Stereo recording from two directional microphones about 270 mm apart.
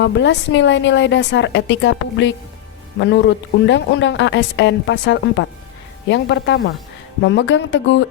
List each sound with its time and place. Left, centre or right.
0.0 s a woman's voice: left